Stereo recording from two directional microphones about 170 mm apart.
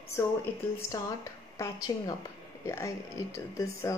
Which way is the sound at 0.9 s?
20° left (ahead or behind).